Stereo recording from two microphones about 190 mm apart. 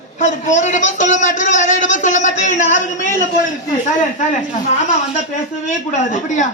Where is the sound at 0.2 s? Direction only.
40° left (ahead or behind).